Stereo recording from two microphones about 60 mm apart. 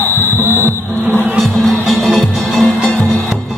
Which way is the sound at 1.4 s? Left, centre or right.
Centre.